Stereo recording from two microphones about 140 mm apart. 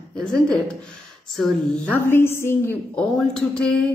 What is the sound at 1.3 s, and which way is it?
Speech, centre (ahead or behind).